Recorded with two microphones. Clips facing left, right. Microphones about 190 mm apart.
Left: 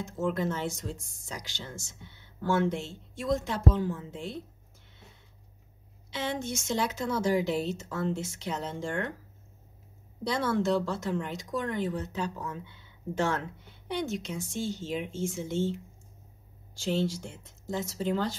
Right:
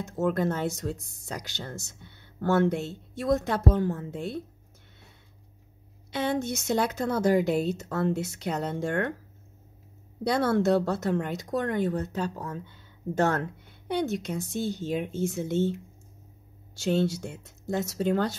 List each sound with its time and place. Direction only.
0.0 s speech: 60° right (ahead or behind)
6.4 s speech: 65° right (ahead or behind)
10.2 s speech: 65° right (ahead or behind)
12.1 s speech: 40° right (ahead or behind); by 15.7 s 60° right (ahead or behind)
16.8 s speech: 65° right (ahead or behind)